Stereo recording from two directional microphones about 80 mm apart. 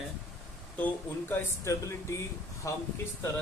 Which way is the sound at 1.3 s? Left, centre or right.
Left.